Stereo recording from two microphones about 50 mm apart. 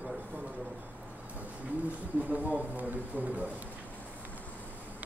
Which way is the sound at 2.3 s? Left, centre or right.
Right.